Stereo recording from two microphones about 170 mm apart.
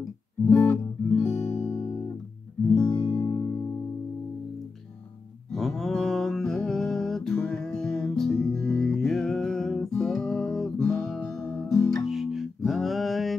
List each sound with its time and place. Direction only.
0.5 s guitar: 10° left (ahead or behind)
3.0 s music: 30° left (ahead or behind)
5.5 s a sound: centre (ahead or behind)
12.1 s music: centre (ahead or behind)